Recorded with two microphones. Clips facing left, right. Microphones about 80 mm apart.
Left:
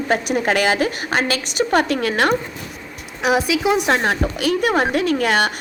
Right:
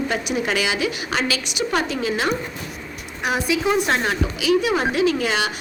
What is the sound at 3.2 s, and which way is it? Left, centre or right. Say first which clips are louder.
A woman's voice: left 4 dB; left.